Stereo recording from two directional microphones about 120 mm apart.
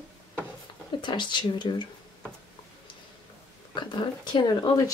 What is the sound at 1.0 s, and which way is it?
Speech, 40° left (ahead or behind).